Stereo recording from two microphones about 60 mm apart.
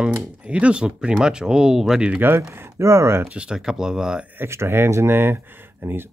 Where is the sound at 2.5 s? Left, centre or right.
Right.